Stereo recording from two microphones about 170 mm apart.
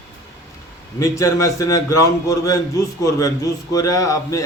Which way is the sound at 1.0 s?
20° left (ahead or behind).